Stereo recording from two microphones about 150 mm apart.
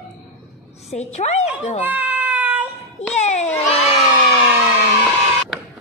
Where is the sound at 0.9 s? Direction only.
45° left (ahead or behind).